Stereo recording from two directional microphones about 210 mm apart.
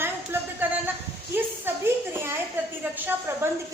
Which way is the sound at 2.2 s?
10° right (ahead or behind).